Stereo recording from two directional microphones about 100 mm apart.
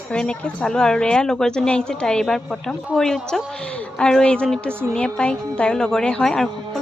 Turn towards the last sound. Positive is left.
turn(degrees=5)  # may be behind; listen again after turning